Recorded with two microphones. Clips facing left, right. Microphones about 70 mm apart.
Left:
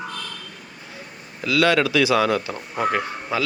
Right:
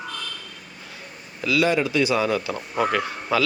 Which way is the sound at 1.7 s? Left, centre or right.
Left.